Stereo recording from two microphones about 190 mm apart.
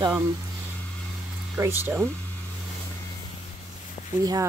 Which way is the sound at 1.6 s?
10° right (ahead or behind).